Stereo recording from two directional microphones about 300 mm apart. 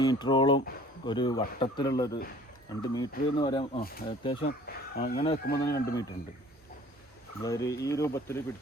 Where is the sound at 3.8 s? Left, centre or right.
Left.